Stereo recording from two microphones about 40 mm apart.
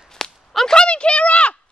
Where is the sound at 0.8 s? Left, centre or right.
Left.